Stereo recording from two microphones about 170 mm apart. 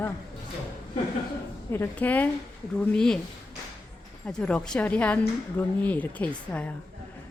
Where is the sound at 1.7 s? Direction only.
10° left (ahead or behind).